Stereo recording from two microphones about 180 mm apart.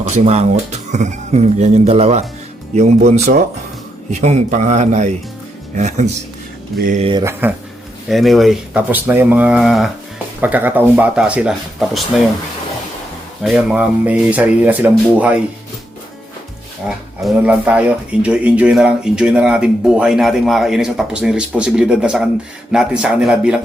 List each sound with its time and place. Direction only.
0.1 s speech: 40° right (ahead or behind)
7.0 s speech: 25° right (ahead or behind)
8.0 s speech: centre (ahead or behind)
13.4 s speech: 5° right (ahead or behind)
17.2 s speech: 5° right (ahead or behind)